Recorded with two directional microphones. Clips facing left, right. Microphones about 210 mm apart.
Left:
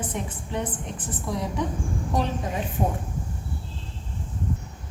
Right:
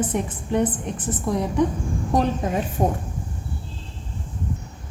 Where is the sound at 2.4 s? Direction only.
50° right (ahead or behind).